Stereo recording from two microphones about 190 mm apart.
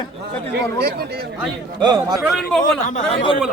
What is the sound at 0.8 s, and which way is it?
Speech, 55° right (ahead or behind).